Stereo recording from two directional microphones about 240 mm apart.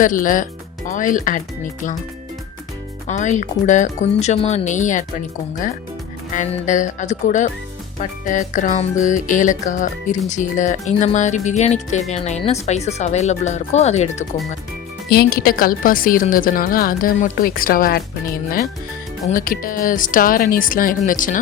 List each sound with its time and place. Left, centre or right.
0.0 s a woman's voice: left
3.1 s music: left
6.3 s a woman's voice: left
8.2 s music: left
15.1 s a woman's voice: left
19.3 s a woman's voice: left